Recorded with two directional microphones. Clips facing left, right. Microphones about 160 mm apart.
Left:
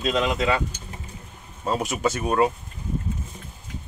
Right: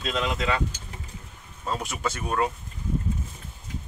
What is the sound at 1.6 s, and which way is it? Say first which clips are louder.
Speech: left 6 dB; 20° left (ahead or behind).